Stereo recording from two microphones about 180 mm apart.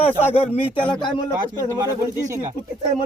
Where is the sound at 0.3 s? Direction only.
35° left (ahead or behind).